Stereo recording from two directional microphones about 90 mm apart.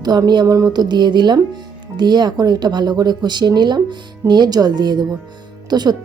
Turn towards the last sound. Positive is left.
turn(degrees=-50)  # may be behind; listen again after turning